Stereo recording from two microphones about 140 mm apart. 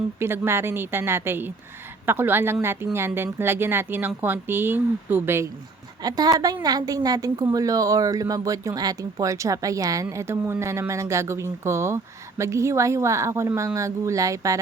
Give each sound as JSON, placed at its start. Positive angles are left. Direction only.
{"t": 0.2, "sound": "speech", "side_deg": -15}
{"t": 6.0, "sound": "speech", "side_deg": -30}